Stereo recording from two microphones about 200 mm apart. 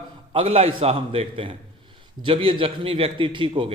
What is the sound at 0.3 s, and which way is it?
A man's voice, 30° right (ahead or behind).